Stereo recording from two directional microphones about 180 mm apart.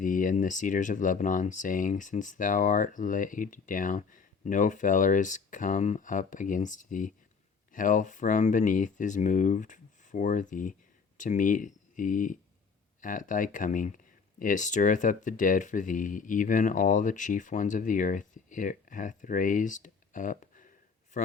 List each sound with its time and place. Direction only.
0.0 s speech: 45° left (ahead or behind)